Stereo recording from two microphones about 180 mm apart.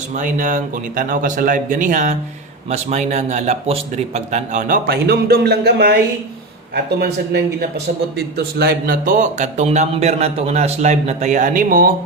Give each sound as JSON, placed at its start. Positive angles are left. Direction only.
{"t": 0.2, "sound": "speech", "side_deg": -45}
{"t": 8.4, "sound": "speech", "side_deg": -60}